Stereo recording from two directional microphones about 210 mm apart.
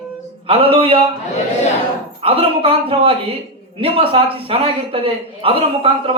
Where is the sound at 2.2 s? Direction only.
25° right (ahead or behind).